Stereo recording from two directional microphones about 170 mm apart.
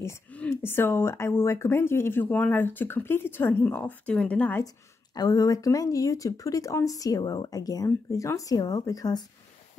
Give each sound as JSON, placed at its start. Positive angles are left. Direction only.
{"t": 0.0, "sound": "speech", "side_deg": 10}
{"t": 5.1, "sound": "speech", "side_deg": 20}